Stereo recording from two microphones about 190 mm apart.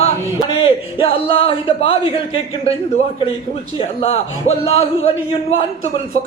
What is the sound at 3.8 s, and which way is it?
A man's voice, 30° left (ahead or behind).